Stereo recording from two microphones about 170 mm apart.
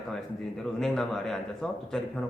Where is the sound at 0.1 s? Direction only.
5° left (ahead or behind).